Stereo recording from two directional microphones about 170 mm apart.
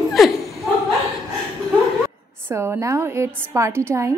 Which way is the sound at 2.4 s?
15° right (ahead or behind).